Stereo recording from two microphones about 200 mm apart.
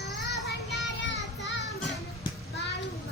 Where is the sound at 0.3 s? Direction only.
60° left (ahead or behind).